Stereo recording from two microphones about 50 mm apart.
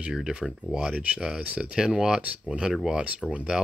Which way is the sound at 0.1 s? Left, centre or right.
Centre.